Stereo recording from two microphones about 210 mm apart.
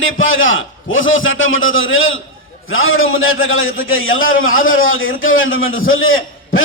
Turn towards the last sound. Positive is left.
turn(degrees=70)  # may be behind; listen again after turning